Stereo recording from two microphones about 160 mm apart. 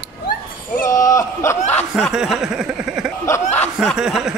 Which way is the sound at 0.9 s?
20° left (ahead or behind).